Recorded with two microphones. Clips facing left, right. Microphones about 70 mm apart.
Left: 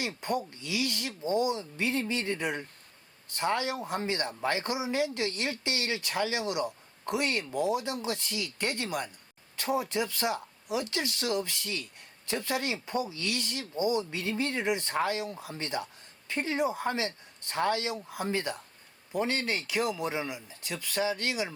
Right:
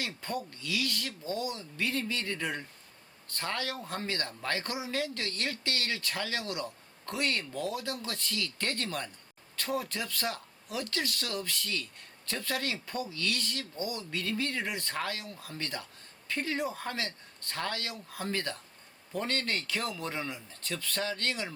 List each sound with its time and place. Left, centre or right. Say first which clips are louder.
0.0 s speech: left 4 dB; centre